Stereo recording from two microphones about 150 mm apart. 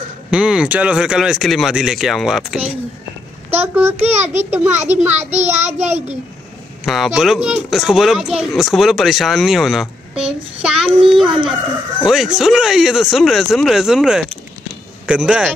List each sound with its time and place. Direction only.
0.3 s a child's voice: 5° right (ahead or behind)
5.1 s a child's voice: 45° right (ahead or behind)
6.9 s a child's voice: centre (ahead or behind)